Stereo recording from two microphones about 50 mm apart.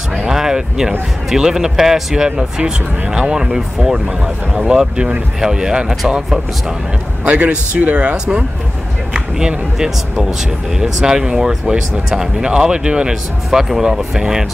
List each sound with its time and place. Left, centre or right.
0.1 s speech: centre
7.2 s speech: right
9.1 s speech: centre